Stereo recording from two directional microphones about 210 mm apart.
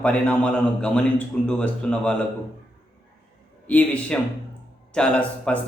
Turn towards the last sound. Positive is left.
turn(degrees=5)  # may be behind; listen again after turning